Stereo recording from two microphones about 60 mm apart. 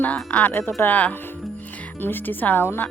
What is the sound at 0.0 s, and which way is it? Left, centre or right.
A woman's voice, left.